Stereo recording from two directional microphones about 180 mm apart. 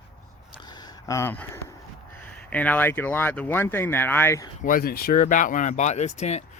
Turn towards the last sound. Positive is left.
turn(degrees=40)  # may be behind; listen again after turning